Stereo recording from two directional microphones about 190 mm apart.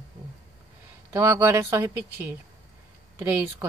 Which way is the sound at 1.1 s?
15° right (ahead or behind).